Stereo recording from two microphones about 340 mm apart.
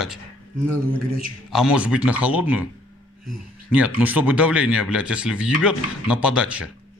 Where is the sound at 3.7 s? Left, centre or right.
Centre.